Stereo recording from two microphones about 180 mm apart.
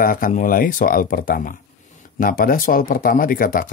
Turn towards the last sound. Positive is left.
turn(degrees=50)  # may be behind; listen again after turning